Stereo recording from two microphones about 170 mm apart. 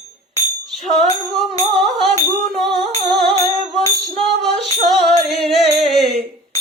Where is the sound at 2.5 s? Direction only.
Centre (ahead or behind).